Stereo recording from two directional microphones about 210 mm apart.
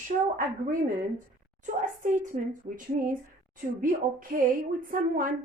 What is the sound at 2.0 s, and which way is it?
A woman's voice, 35° right (ahead or behind).